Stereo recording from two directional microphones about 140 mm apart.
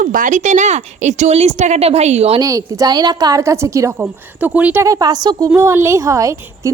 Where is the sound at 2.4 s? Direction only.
25° right (ahead or behind).